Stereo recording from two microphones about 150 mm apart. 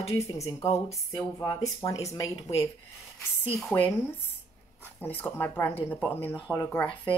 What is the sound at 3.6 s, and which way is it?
Speech, 5° left (ahead or behind).